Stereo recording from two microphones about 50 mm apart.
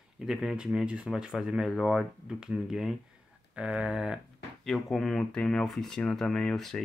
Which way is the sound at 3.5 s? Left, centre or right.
Right.